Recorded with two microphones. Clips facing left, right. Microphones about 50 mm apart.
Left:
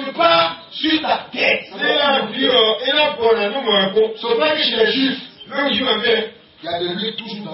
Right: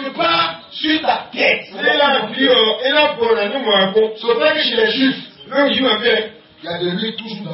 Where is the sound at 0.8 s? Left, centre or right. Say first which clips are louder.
Right 1 dB; right.